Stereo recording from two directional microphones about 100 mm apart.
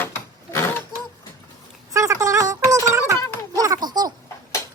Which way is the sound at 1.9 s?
30° right (ahead or behind).